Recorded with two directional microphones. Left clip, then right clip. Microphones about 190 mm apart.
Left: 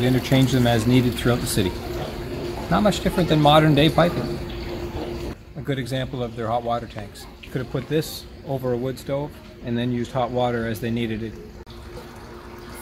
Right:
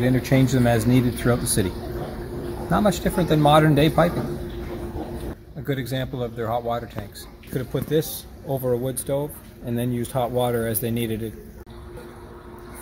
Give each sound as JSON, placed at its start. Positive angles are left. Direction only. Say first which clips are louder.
{"t": 0.0, "sound": "speech", "louder": "even", "side_deg": -20}
{"t": 2.7, "sound": "speech", "louder": "left 1 dB", "side_deg": -10}
{"t": 5.7, "sound": "speech", "louder": "even", "side_deg": -10}
{"t": 7.5, "sound": "speech", "louder": "right 1 dB", "side_deg": -25}